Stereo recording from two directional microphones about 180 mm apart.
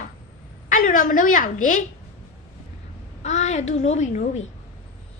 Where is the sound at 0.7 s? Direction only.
50° left (ahead or behind).